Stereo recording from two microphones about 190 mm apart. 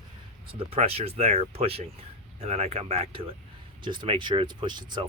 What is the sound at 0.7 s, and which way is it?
Speech, 30° right (ahead or behind).